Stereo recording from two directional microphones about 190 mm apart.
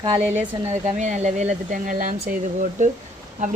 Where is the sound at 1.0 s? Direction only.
40° right (ahead or behind).